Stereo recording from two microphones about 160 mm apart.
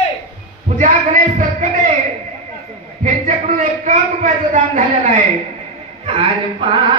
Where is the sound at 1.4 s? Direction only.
50° right (ahead or behind).